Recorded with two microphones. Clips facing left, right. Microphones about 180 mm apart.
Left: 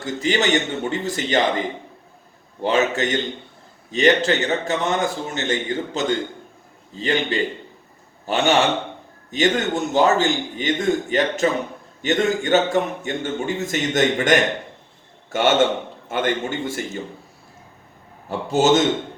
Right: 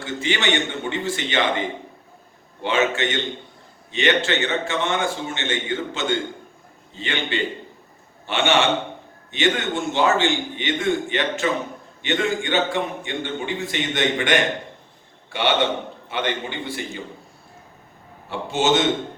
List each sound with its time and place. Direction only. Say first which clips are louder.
0.0 s a man's voice: left 3 dB; 40° left (ahead or behind)
18.3 s a man's voice: left 4 dB; 40° left (ahead or behind)